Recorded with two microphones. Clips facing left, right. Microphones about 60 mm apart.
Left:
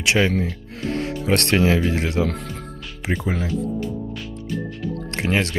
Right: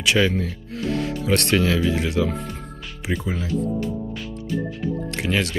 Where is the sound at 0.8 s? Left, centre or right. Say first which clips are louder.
Even; left.